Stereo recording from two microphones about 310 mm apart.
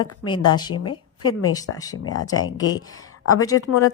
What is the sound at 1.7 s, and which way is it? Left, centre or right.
Speech, centre.